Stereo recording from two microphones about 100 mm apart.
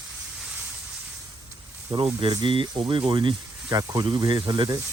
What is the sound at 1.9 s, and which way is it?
Speech, 55° right (ahead or behind).